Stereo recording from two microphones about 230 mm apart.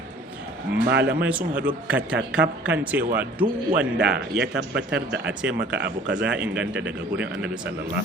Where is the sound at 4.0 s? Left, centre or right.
Right.